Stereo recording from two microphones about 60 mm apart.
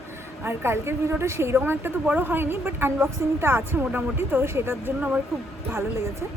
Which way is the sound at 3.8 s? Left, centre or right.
Right.